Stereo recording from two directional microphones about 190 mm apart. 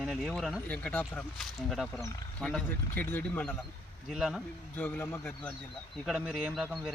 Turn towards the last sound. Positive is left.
turn(degrees=0)  # may be behind; listen again after turning